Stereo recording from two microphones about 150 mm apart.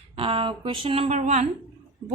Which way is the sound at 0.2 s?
35° right (ahead or behind).